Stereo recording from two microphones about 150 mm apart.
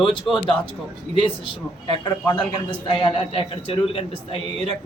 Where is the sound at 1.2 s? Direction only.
35° left (ahead or behind).